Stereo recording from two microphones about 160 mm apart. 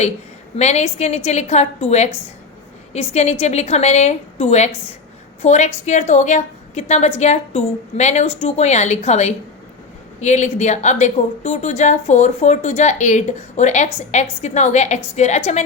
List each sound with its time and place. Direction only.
0.5 s a woman's voice: 45° left (ahead or behind)